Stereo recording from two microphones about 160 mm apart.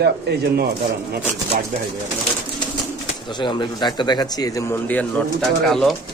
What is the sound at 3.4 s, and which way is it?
A man's voice, 30° left (ahead or behind).